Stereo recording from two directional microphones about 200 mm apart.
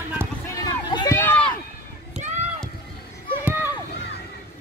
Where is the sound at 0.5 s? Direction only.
20° left (ahead or behind).